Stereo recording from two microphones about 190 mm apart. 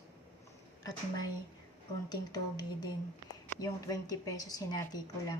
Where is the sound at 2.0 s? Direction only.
20° left (ahead or behind).